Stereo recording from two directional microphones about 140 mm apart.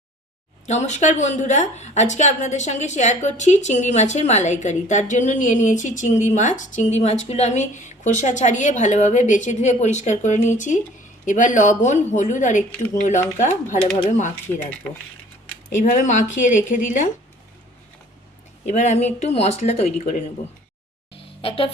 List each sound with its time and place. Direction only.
0.7 s a woman's voice: 55° left (ahead or behind)
15.8 s a woman's voice: 70° left (ahead or behind)
18.6 s speech: 60° left (ahead or behind)
21.4 s speech: 40° left (ahead or behind)